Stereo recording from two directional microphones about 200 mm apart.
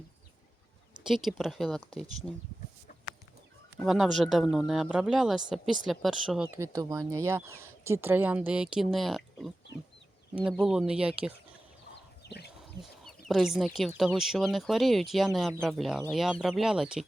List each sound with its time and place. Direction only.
1.0 s speech: centre (ahead or behind)
3.8 s speech: centre (ahead or behind)
12.2 s chicken: 55° left (ahead or behind)
12.8 s speech: centre (ahead or behind)